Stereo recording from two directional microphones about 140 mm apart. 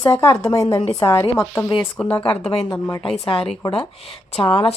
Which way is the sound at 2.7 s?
20° left (ahead or behind).